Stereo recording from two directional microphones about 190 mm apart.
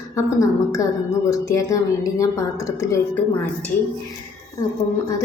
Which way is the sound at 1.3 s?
15° left (ahead or behind).